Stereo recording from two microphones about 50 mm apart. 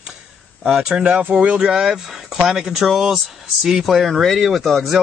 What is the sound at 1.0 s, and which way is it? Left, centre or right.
Speech, right.